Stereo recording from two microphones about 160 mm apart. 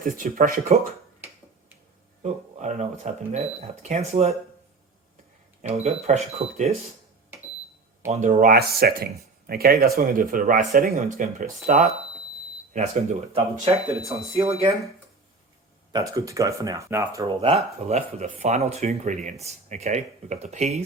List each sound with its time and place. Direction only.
0.0 s speech: 60° right (ahead or behind)
2.2 s speech: 45° right (ahead or behind)
5.6 s speech: 45° right (ahead or behind)
8.0 s speech: 45° right (ahead or behind)
8.4 s speech: 70° right (ahead or behind); by 14.7 s 40° right (ahead or behind)
15.9 s speech: 20° right (ahead or behind)
17.2 s speech: 35° right (ahead or behind)